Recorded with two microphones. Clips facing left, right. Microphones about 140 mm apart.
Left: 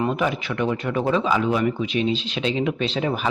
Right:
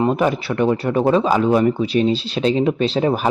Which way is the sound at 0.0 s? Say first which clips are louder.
Right 5 dB; 40° right (ahead or behind).